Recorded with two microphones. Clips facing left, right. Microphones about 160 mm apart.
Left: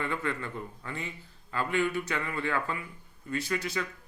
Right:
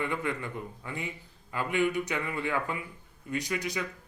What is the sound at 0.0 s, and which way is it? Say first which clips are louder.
Speech: right 1 dB; 15° right (ahead or behind).